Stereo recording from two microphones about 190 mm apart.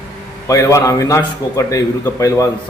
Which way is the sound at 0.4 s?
15° left (ahead or behind).